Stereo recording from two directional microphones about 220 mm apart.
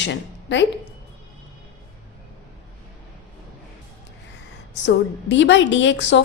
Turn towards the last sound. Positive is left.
turn(degrees=55)  # may be behind; listen again after turning